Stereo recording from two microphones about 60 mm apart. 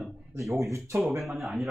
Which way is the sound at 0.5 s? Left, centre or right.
Right.